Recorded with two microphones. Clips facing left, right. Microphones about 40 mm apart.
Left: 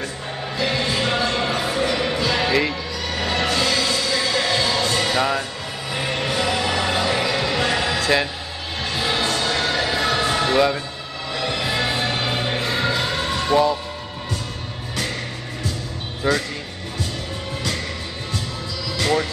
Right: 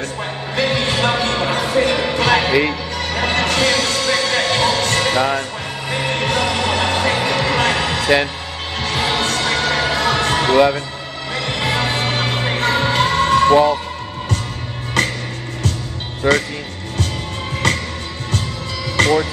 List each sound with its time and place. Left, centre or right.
0.6 s music: right
8.0 s music: right
8.8 s music: right
15.0 s music: right
16.2 s speech: right
17.6 s music: right
19.0 s music: right